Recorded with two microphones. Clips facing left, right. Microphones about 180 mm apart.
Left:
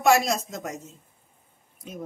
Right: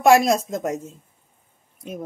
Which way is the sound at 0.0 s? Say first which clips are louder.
Right 6 dB; 50° right (ahead or behind).